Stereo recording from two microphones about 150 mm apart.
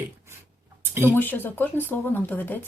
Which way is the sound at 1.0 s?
10° left (ahead or behind).